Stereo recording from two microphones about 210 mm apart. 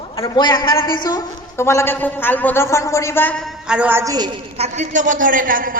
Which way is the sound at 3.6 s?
5° right (ahead or behind).